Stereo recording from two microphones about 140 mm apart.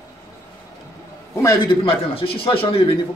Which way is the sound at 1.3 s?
25° left (ahead or behind).